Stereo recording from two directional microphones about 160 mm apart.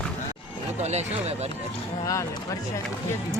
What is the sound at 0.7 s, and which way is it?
Speech, 45° right (ahead or behind).